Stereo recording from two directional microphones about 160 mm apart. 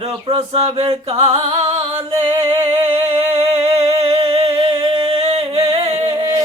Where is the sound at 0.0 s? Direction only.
35° right (ahead or behind).